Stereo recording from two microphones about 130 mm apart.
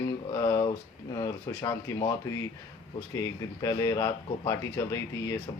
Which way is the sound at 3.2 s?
25° left (ahead or behind).